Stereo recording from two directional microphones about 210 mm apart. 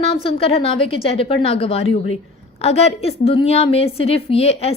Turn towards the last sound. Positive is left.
turn(degrees=30)  # may be behind; listen again after turning